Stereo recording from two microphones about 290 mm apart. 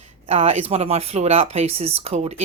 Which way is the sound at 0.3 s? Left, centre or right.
Right.